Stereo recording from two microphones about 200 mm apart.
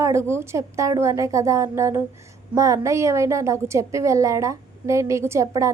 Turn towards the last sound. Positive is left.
turn(degrees=-15)  # may be behind; listen again after turning